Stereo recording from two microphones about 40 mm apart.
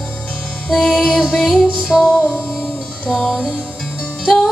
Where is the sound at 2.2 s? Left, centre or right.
Left.